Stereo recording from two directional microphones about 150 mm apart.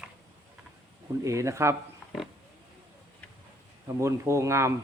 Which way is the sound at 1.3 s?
20° right (ahead or behind).